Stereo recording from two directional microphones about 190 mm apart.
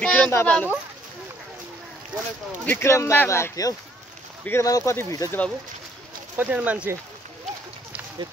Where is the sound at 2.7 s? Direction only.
15° left (ahead or behind).